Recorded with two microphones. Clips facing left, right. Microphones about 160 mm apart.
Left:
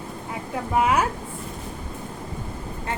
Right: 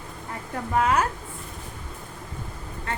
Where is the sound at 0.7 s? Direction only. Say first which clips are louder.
Left 1 dB; 10° left (ahead or behind).